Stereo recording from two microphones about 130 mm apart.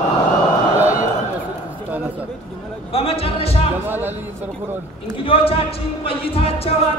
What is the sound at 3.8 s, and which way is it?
Speech, 15° right (ahead or behind).